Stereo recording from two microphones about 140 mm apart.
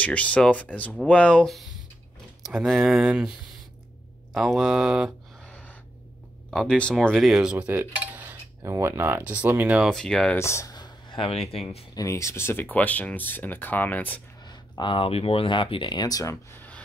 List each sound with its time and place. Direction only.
0.0 s speech: 10° left (ahead or behind)
5.5 s gasp: 10° left (ahead or behind)
6.5 s speech: 5° left (ahead or behind); by 9.8 s 10° right (ahead or behind)
9.8 s speech: 5° left (ahead or behind)
10.3 s speech: 20° left (ahead or behind); by 11.8 s 45° left (ahead or behind)
11.9 s speech: 25° left (ahead or behind)
14.4 s speech: 30° left (ahead or behind)